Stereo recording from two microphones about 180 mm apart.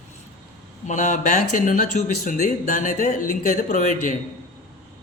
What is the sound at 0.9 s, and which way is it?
Speech, 40° left (ahead or behind).